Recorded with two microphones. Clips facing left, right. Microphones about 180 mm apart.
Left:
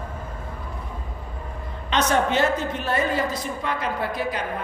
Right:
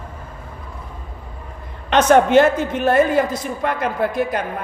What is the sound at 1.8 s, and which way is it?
A woman's voice, 55° right (ahead or behind).